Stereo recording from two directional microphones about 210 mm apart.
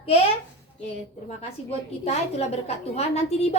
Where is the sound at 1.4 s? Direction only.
30° left (ahead or behind).